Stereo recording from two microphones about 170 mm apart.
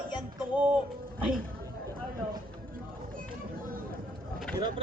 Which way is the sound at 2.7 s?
55° right (ahead or behind).